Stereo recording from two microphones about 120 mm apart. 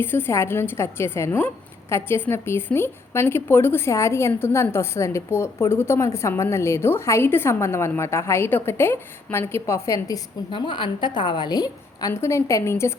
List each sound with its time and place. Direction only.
0.0 s a woman's voice: 20° left (ahead or behind)
10.5 s a woman's voice: 45° left (ahead or behind); by 12.9 s 25° left (ahead or behind)